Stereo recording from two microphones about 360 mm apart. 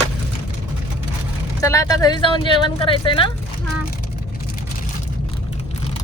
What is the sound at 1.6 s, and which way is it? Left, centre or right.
Speech, centre.